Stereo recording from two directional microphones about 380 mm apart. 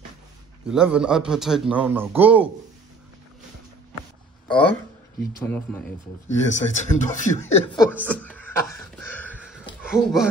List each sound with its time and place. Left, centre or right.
0.7 s a man's voice: centre
4.5 s a man's voice: centre
6.2 s speech: centre
7.1 s a man's voice: centre
9.0 s a sound: centre